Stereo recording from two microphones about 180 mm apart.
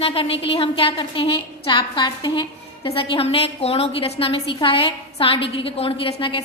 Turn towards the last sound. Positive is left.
turn(degrees=30)  # may be behind; listen again after turning